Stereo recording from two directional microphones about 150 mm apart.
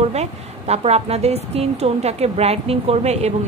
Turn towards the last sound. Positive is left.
turn(degrees=-45)  # may be behind; listen again after turning